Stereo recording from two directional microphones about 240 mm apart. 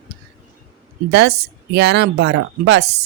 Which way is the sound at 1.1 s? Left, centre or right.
Right.